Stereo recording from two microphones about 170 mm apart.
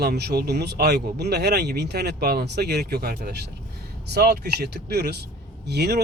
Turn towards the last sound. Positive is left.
turn(degrees=-75)  # may be behind; listen again after turning